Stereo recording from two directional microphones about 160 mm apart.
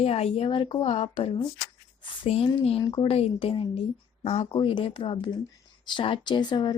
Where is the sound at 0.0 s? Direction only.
40° left (ahead or behind).